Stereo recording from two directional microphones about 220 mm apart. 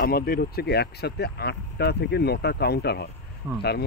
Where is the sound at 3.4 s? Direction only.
10° right (ahead or behind).